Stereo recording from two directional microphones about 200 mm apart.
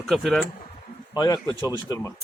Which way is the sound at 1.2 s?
20° left (ahead or behind).